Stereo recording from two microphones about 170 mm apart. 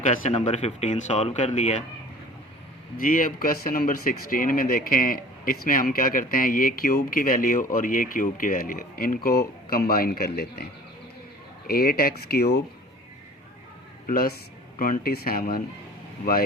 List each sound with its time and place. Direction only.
0.0 s speech: 50° left (ahead or behind)
3.0 s speech: 55° left (ahead or behind)
11.7 s speech: 60° left (ahead or behind)
14.1 s speech: 60° left (ahead or behind)